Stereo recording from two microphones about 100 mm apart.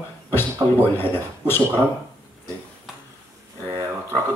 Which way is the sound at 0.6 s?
35° right (ahead or behind).